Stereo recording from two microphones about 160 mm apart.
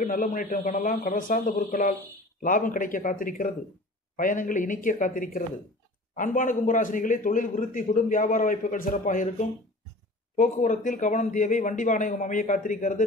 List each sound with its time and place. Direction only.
0.0 s a man's voice: 55° left (ahead or behind)